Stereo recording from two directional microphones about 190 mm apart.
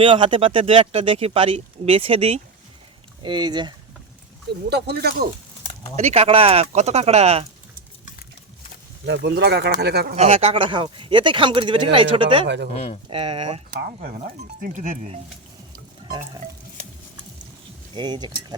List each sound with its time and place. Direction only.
0.0 s speech: 25° right (ahead or behind)
4.7 s speech: 60° right (ahead or behind)
6.0 s speech: 35° right (ahead or behind)
9.0 s speech: 60° right (ahead or behind)
10.2 s speech: 35° right (ahead or behind)
12.7 s speech: 30° left (ahead or behind)
13.1 s speech: 30° right (ahead or behind)
13.7 s speech: 50° right (ahead or behind)
16.0 s stir: 20° right (ahead or behind)
17.9 s speech: 25° right (ahead or behind)